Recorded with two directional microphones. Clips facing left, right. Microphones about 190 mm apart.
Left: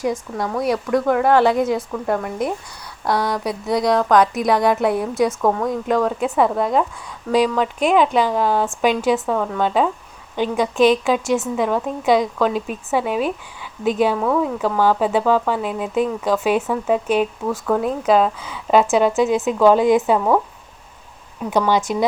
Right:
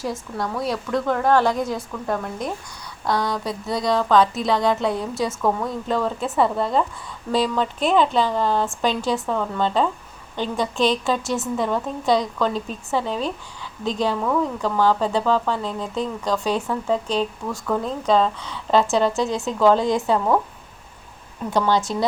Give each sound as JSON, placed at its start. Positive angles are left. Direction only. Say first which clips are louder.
{"t": 0.4, "sound": "a woman's voice", "louder": "left 4 dB", "side_deg": 20}
{"t": 0.7, "sound": "speech", "louder": "left 7 dB", "side_deg": 0}
{"t": 1.0, "sound": "a woman's voice", "louder": "left 3 dB", "side_deg": 10}
{"t": 1.7, "sound": "a woman's voice", "louder": "left 5 dB", "side_deg": 5}
{"t": 3.2, "sound": "a woman's voice", "louder": "left 4 dB", "side_deg": 20}
{"t": 8.9, "sound": "a woman's voice", "louder": "left 5 dB", "side_deg": 15}
{"t": 11.5, "sound": "a woman's voice", "louder": "left 3 dB", "side_deg": 5}
{"t": 16.4, "sound": "a woman's voice", "louder": "left 4 dB", "side_deg": 20}
{"t": 21.5, "sound": "a woman's voice", "louder": "left 2 dB", "side_deg": 15}